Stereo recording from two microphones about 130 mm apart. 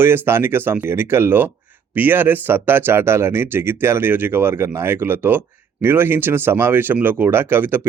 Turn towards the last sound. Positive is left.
turn(degrees=-15)  # may be behind; listen again after turning